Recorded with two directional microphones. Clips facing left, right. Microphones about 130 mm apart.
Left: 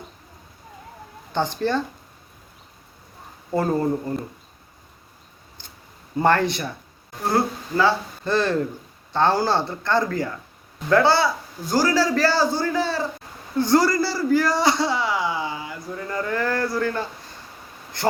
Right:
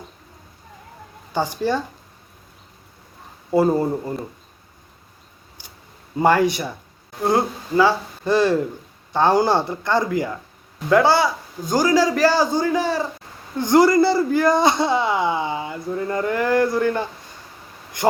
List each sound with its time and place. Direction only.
1.3 s a man's voice: 10° right (ahead or behind)
3.5 s a man's voice: 10° right (ahead or behind)
6.1 s a man's voice: 10° right (ahead or behind)
18.0 s a sound: 15° right (ahead or behind)